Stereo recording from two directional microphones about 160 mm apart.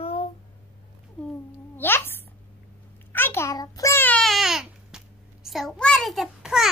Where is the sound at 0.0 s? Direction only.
35° left (ahead or behind).